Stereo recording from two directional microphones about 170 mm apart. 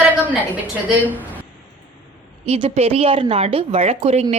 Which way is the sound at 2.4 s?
35° right (ahead or behind).